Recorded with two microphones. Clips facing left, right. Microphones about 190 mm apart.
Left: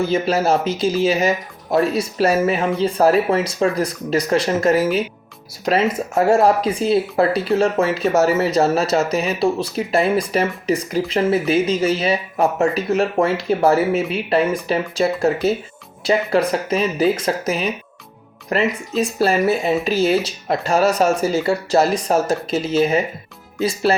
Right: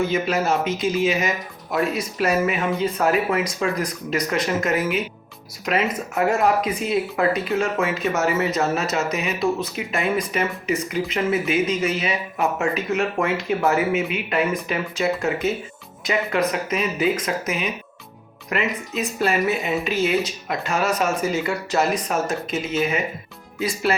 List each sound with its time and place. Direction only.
0.0 s speech: 35° left (ahead or behind)